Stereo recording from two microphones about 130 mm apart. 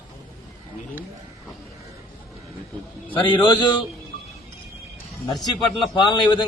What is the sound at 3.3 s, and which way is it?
Speech, 35° left (ahead or behind).